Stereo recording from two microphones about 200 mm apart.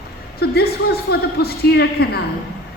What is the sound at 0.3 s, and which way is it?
A woman's voice, 50° left (ahead or behind).